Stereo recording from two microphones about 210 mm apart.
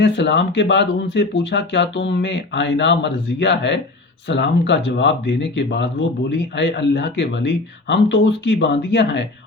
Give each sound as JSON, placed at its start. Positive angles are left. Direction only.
{"t": 0.0, "sound": "speech", "side_deg": 55}